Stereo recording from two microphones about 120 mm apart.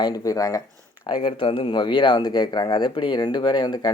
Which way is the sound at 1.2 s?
50° left (ahead or behind).